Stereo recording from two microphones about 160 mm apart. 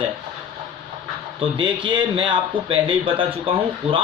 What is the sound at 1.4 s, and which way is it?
A man's voice, 30° right (ahead or behind).